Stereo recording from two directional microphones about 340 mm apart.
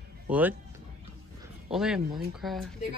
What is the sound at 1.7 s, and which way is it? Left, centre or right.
Speech, centre.